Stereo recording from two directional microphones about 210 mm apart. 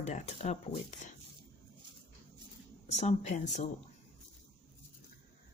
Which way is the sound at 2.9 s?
35° left (ahead or behind).